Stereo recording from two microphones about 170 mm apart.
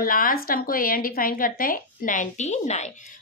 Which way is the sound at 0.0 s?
55° left (ahead or behind).